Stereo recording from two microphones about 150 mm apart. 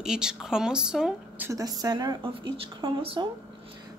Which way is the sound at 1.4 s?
25° right (ahead or behind).